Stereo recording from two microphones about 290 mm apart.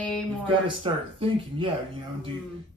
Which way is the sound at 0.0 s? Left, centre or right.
Centre.